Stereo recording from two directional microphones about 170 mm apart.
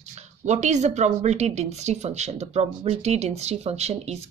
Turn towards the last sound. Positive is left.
turn(degrees=-40)  # may be behind; listen again after turning